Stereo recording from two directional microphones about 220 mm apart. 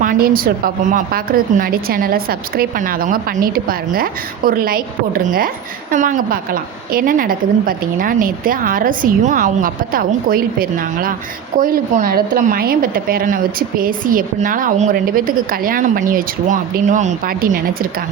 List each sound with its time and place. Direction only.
0.0 s a woman's voice: 40° right (ahead or behind)